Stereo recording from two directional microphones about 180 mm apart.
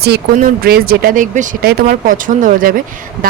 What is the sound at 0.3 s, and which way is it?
Speech, 55° right (ahead or behind).